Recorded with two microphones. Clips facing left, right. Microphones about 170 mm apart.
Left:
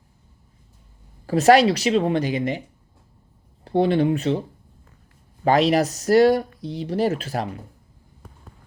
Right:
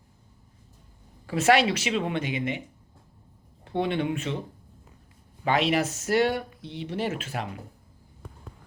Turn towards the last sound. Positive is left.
turn(degrees=35)  # may be behind; listen again after turning